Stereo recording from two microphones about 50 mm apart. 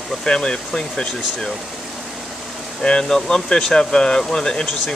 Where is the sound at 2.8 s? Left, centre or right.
Centre.